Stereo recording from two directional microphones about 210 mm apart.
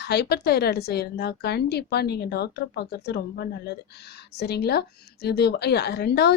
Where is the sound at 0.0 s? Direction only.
50° left (ahead or behind).